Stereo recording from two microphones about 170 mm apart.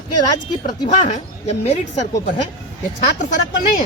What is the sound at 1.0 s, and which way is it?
A woman's voice, 40° left (ahead or behind).